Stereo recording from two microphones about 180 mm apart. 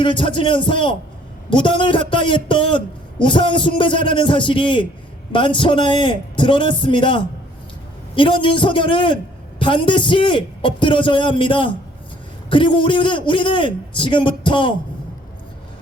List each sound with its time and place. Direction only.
0.0 s a man's voice: 30° left (ahead or behind)